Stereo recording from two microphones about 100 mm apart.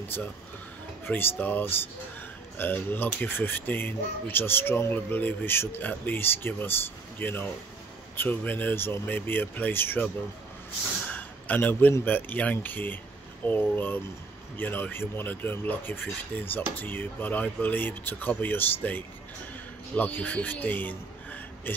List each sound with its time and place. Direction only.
0.1 s speech: 20° left (ahead or behind)
11.1 s a sound: 15° left (ahead or behind)
11.9 s a man's voice: 20° left (ahead or behind)